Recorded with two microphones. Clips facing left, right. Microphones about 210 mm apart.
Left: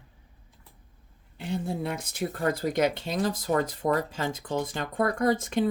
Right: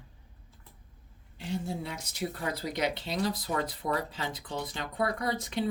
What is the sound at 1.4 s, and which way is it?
Speech, 55° left (ahead or behind).